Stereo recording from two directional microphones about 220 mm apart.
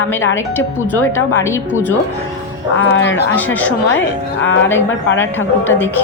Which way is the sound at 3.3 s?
10° left (ahead or behind).